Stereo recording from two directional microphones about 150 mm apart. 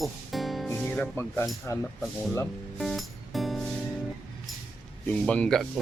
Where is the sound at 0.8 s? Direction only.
10° left (ahead or behind).